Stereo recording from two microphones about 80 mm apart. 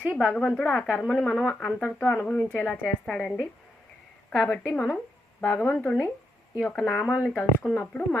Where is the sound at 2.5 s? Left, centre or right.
Centre.